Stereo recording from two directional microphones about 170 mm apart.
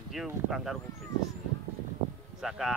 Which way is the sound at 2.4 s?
Centre (ahead or behind).